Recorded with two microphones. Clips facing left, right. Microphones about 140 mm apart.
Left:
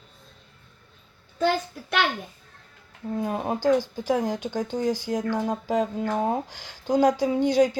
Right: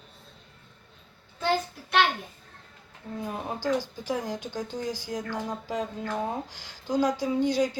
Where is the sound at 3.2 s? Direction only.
50° left (ahead or behind).